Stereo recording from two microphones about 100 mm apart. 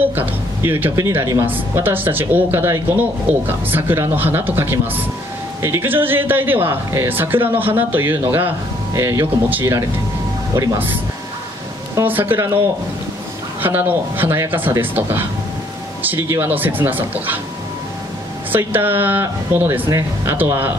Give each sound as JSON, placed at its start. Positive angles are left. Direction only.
{"t": 0.1, "sound": "a man's voice", "side_deg": -20}
{"t": 10.5, "sound": "speech", "side_deg": -35}
{"t": 12.0, "sound": "a man's voice", "side_deg": -20}
{"t": 18.5, "sound": "a man's voice", "side_deg": -20}
{"t": 19.9, "sound": "speech", "side_deg": -30}
{"t": 20.3, "sound": "a man's voice", "side_deg": -20}